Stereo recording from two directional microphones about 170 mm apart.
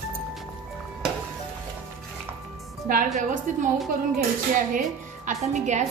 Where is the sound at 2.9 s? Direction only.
55° right (ahead or behind).